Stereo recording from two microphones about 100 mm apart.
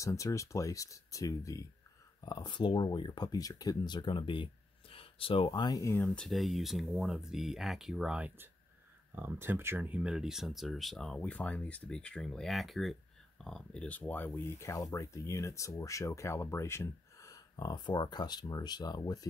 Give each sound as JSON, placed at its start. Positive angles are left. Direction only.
{"t": 0.0, "sound": "speech", "side_deg": 30}
{"t": 2.2, "sound": "speech", "side_deg": 45}
{"t": 5.6, "sound": "speech", "side_deg": 35}
{"t": 6.0, "sound": "speech", "side_deg": 5}
{"t": 9.1, "sound": "speech", "side_deg": -20}
{"t": 11.1, "sound": "speech", "side_deg": 15}